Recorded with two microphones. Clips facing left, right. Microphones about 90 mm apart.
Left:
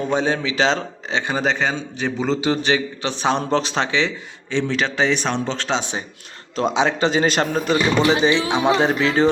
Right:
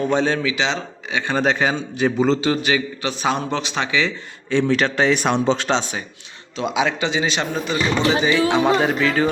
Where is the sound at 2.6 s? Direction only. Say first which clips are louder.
Left 1 dB; 30° left (ahead or behind).